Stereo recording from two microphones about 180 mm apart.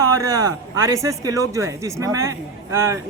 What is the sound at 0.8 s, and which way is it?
Speech, 15° right (ahead or behind).